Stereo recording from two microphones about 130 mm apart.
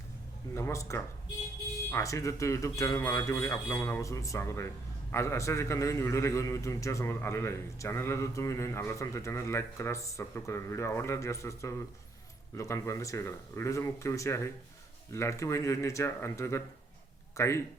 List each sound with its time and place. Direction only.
0.5 s a man's voice: 20° left (ahead or behind)